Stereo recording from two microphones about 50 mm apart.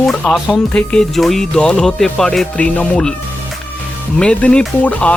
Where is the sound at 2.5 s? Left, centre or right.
Left.